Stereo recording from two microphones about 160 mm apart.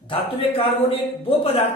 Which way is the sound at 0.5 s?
35° left (ahead or behind).